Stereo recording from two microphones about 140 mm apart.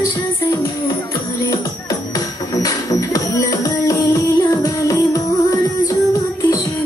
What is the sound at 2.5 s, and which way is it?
Music, 25° left (ahead or behind).